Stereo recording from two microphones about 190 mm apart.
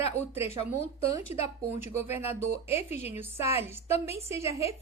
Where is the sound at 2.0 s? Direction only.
10° right (ahead or behind).